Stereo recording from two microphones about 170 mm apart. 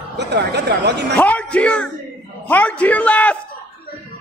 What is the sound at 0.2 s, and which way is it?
Speech, 80° right.